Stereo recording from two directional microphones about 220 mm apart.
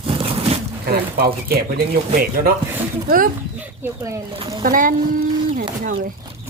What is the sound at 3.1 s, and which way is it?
Speech, 40° right (ahead or behind).